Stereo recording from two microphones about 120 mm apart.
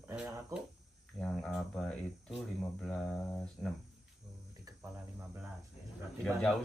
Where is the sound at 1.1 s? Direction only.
5° left (ahead or behind).